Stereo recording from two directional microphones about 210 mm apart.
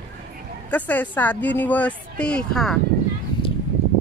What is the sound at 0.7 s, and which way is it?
Speech, 5° left (ahead or behind).